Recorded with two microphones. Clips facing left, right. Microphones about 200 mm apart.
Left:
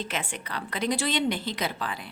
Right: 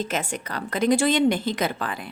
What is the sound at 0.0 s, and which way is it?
A woman's voice, 40° right (ahead or behind).